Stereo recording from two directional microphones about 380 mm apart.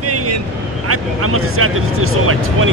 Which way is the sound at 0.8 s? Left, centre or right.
Right.